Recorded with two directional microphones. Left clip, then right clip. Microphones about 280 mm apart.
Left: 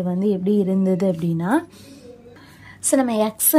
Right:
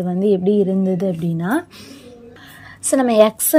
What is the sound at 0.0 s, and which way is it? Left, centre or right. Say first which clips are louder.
A woman's voice: right 5 dB; centre.